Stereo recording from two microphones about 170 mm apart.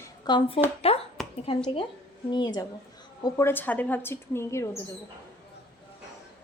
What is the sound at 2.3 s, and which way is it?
A woman's voice, 25° left (ahead or behind).